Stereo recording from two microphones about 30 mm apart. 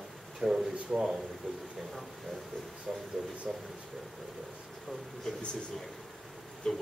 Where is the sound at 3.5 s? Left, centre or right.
Centre.